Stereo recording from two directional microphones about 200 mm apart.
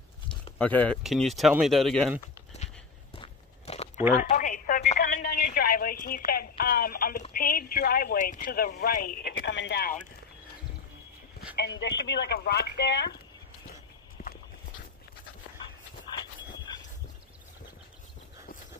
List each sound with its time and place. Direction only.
0.6 s speech: 5° left (ahead or behind)
2.6 s walk: 35° left (ahead or behind)
4.2 s a sound: 40° left (ahead or behind)
7.3 s speech: 50° left (ahead or behind)
9.5 s speech: 60° left (ahead or behind)
11.5 s speech: 60° left (ahead or behind)
14.2 s walk: 45° left (ahead or behind)